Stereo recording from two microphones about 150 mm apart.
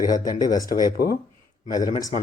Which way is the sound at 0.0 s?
25° left (ahead or behind).